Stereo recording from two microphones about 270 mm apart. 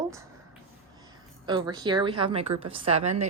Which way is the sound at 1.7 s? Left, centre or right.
Centre.